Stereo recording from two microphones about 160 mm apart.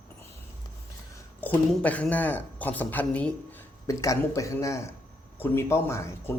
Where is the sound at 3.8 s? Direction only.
20° left (ahead or behind).